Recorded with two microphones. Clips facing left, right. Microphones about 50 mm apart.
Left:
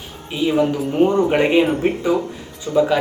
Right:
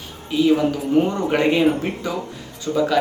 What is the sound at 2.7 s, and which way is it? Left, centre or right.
Speech, centre.